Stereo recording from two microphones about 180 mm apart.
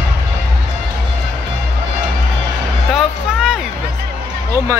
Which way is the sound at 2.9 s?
Centre (ahead or behind).